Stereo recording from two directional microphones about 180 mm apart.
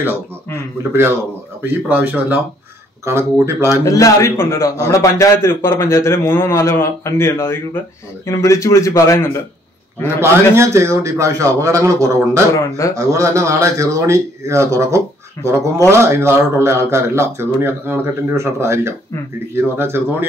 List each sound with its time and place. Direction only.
1.6 s speech: 10° right (ahead or behind)
3.8 s a man's voice: 20° left (ahead or behind)
10.0 s speech: 15° right (ahead or behind)
12.5 s a man's voice: 15° left (ahead or behind)
12.9 s speech: 20° right (ahead or behind)